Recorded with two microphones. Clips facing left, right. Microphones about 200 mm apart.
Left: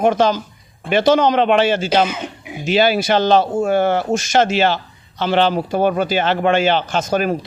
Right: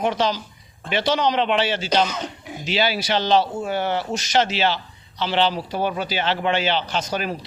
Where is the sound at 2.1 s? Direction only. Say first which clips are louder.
Left 3 dB; 10° left (ahead or behind).